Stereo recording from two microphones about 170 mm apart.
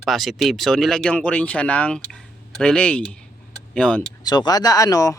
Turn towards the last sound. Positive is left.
turn(degrees=20)  # may be behind; listen again after turning